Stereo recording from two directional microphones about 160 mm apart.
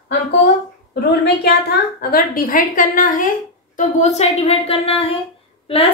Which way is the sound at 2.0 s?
65° left (ahead or behind).